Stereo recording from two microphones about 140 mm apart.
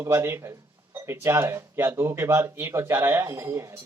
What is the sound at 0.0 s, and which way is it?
Speech, 15° right (ahead or behind).